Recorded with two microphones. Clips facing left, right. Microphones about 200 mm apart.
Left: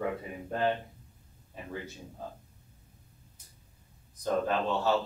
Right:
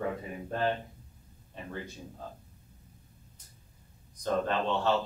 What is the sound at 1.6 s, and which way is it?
Speech, 5° left (ahead or behind).